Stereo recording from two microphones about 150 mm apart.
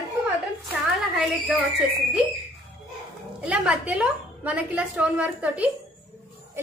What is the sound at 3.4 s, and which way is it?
A woman's voice, 5° right (ahead or behind).